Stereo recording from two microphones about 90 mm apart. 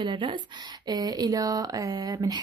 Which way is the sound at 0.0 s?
65° right (ahead or behind).